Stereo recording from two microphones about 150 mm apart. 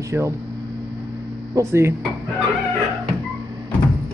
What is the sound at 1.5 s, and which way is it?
Speech, 20° right (ahead or behind).